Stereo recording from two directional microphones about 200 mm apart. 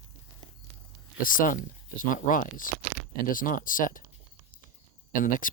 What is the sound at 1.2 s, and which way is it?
Speech, 45° left (ahead or behind).